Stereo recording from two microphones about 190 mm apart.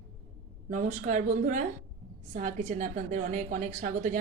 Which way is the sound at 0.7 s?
40° right (ahead or behind).